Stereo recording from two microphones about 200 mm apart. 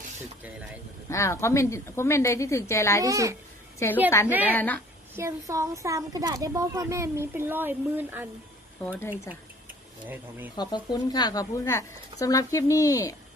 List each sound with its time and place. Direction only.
1.1 s speech: 15° left (ahead or behind)
3.0 s speech: 15° right (ahead or behind)
3.8 s speech: 15° left (ahead or behind)
4.3 s speech: 10° right (ahead or behind)
4.5 s speech: 10° left (ahead or behind)
5.1 s speech: 15° right (ahead or behind)
8.8 s speech: 5° left (ahead or behind)
10.1 s speech: 10° right (ahead or behind)
10.6 s speech: 20° left (ahead or behind)